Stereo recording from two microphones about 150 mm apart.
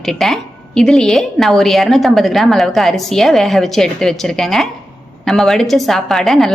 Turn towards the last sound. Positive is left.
turn(degrees=0)  # may be behind; listen again after turning